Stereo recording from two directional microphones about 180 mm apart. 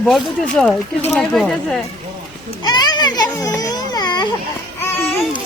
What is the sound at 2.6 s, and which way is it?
Baby cry, 25° left (ahead or behind).